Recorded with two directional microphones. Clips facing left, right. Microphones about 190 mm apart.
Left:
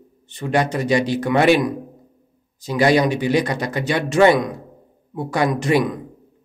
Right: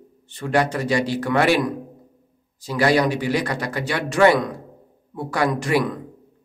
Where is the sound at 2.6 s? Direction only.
20° left (ahead or behind).